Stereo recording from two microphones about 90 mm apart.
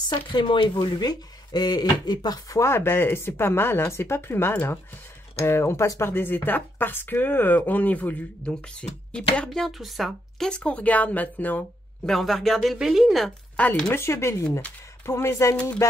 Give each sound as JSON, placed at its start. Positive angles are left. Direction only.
{"t": 0.1, "sound": "speech", "side_deg": 60}
{"t": 2.6, "sound": "speech", "side_deg": 25}
{"t": 9.1, "sound": "speech", "side_deg": 10}
{"t": 10.5, "sound": "speech", "side_deg": 10}
{"t": 12.1, "sound": "speech", "side_deg": 0}
{"t": 13.6, "sound": "speech", "side_deg": 15}
{"t": 13.9, "sound": "speech", "side_deg": 30}
{"t": 15.8, "sound": "music", "side_deg": 30}